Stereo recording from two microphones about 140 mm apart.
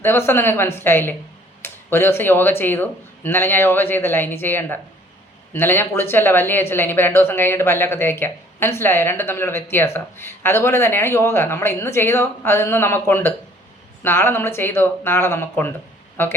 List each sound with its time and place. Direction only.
0.0 s speech: 15° left (ahead or behind)